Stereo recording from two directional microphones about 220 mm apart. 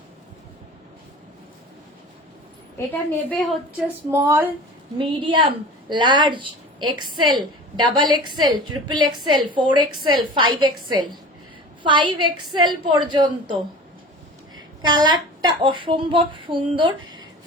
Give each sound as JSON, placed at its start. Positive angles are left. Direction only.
{"t": 2.7, "sound": "a woman's voice", "side_deg": 5}
{"t": 4.1, "sound": "a woman's voice", "side_deg": -15}